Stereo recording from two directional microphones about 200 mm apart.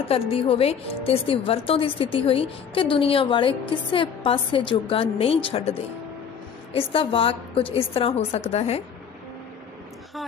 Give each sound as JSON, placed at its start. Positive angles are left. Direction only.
{"t": 0.1, "sound": "a woman's voice", "side_deg": 30}